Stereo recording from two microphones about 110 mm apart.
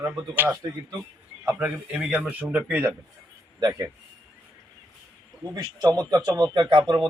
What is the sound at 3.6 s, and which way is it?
Speech, 35° right (ahead or behind).